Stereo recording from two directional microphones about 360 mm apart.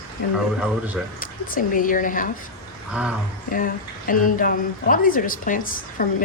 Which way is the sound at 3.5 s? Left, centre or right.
Left.